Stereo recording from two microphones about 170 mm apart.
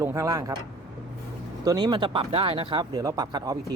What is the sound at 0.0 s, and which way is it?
Speech, 15° right (ahead or behind).